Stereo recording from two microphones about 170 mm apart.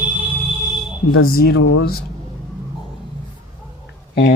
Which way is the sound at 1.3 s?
65° left (ahead or behind).